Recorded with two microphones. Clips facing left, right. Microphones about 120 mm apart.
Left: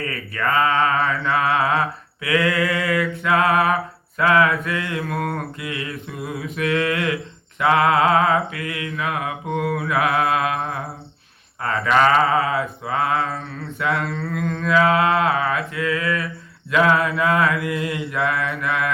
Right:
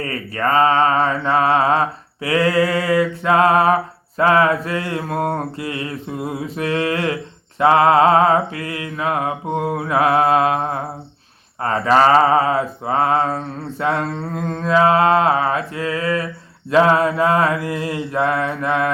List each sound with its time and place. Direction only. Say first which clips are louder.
0.0 s mantra: right 3 dB; 35° right (ahead or behind)